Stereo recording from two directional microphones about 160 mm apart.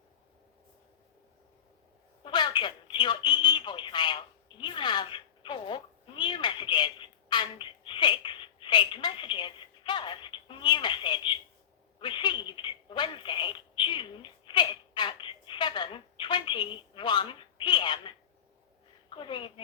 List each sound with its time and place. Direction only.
2.2 s telephone: 30° left (ahead or behind)
4.6 s cat: 30° left (ahead or behind)
11.9 s telephone: 30° left (ahead or behind)
19.1 s a sound: 30° left (ahead or behind)